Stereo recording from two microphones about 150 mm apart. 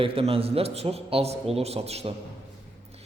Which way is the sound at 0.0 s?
40° right (ahead or behind).